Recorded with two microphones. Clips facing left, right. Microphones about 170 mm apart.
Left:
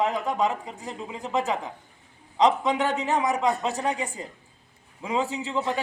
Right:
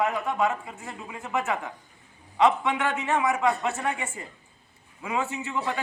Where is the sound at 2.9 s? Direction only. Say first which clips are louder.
Left 1 dB; 20° left (ahead or behind).